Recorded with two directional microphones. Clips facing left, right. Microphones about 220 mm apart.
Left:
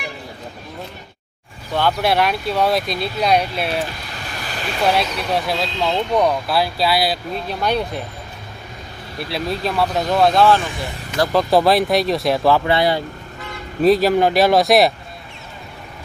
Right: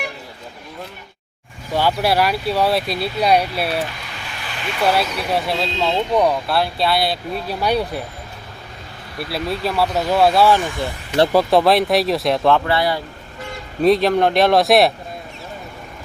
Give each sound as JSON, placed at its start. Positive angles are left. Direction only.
{"t": 1.7, "sound": "speech", "side_deg": -10}
{"t": 3.8, "sound": "vehicle", "side_deg": 40}
{"t": 4.9, "sound": "speech", "side_deg": 0}
{"t": 7.6, "sound": "speech", "side_deg": -10}
{"t": 9.3, "sound": "speech", "side_deg": -5}
{"t": 12.6, "sound": "speech", "side_deg": 20}
{"t": 13.8, "sound": "speech", "side_deg": 5}